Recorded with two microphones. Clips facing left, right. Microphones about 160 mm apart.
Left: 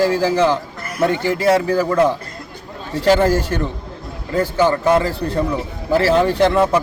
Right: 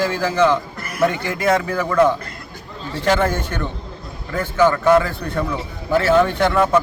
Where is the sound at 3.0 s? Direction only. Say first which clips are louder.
Left 4 dB; 30° left (ahead or behind).